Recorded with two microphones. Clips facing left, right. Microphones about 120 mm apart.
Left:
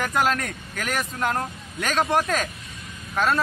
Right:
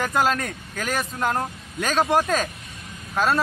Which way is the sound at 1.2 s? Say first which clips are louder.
Right 1 dB; 20° right (ahead or behind).